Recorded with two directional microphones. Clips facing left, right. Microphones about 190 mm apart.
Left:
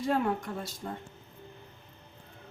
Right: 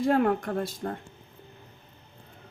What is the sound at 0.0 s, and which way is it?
Speech, 60° right (ahead or behind).